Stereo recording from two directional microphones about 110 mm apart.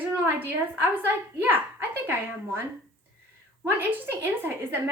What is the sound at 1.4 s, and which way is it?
A child's voice, 20° right (ahead or behind).